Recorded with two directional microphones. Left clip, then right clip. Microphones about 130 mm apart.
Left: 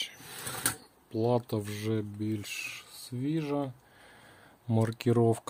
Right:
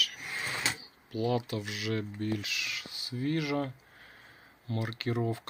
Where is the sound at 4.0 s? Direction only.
65° left (ahead or behind); by 5.4 s 90° left.